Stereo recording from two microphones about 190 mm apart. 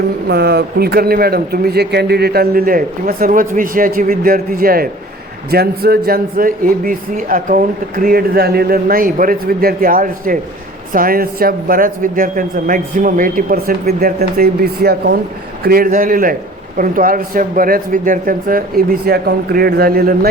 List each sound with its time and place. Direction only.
0.3 s speech: 60° right (ahead or behind)